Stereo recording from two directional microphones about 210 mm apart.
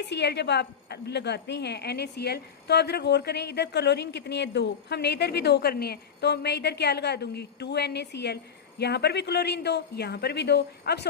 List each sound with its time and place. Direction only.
0.0 s a woman's voice: 55° left (ahead or behind)